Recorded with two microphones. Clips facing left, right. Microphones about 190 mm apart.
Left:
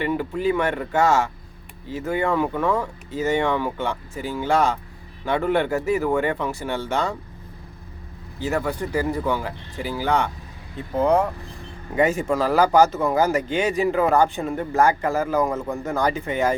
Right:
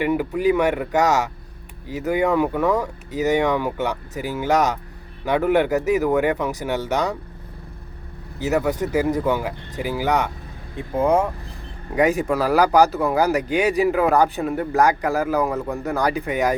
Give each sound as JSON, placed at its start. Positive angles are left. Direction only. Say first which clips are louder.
{"t": 0.0, "sound": "speech", "louder": "right 3 dB", "side_deg": -10}
{"t": 8.4, "sound": "speech", "louder": "right 4 dB", "side_deg": -5}
{"t": 12.9, "sound": "speech", "louder": "right 1 dB", "side_deg": 0}
{"t": 13.5, "sound": "speech", "louder": "right 3 dB", "side_deg": -15}
{"t": 14.8, "sound": "speech", "louder": "even", "side_deg": -15}
{"t": 16.0, "sound": "speech", "louder": "right 1 dB", "side_deg": -15}